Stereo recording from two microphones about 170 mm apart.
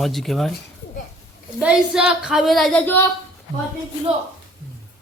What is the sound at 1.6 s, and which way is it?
Speech, 5° right (ahead or behind).